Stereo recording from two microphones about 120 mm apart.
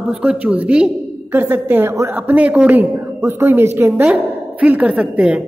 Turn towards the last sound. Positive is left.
turn(degrees=-10)  # may be behind; listen again after turning